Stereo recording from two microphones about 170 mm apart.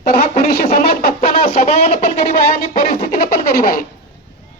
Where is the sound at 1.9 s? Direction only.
60° left (ahead or behind).